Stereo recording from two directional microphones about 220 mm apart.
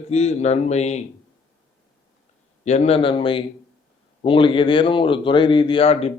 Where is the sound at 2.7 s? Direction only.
30° left (ahead or behind).